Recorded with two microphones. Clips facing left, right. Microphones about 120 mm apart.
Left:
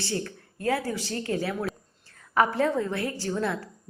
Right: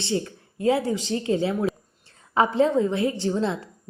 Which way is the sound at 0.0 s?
20° right (ahead or behind).